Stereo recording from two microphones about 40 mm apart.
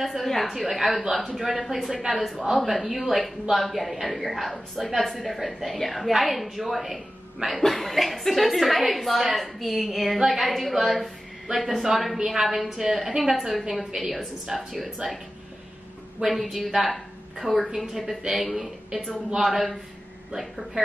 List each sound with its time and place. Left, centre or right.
0.0 s a woman's voice: centre
16.3 s speech: centre
17.4 s a woman's voice: centre